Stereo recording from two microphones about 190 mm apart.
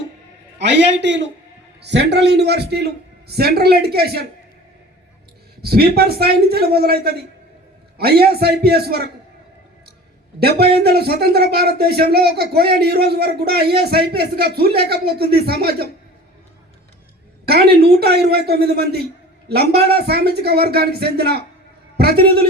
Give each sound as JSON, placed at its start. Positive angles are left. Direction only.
{"t": 0.6, "sound": "a man's voice", "side_deg": -65}
{"t": 5.6, "sound": "speech", "side_deg": -55}
{"t": 10.4, "sound": "speech", "side_deg": -55}
{"t": 17.4, "sound": "speech", "side_deg": -55}